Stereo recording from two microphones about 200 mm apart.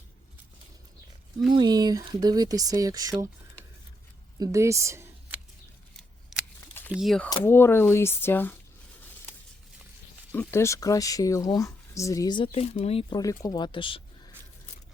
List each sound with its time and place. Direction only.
1.5 s speech: 20° right (ahead or behind)
4.4 s speech: 15° right (ahead or behind)
6.9 s speech: centre (ahead or behind)
7.3 s speech: 15° left (ahead or behind)
10.3 s speech: 15° left (ahead or behind)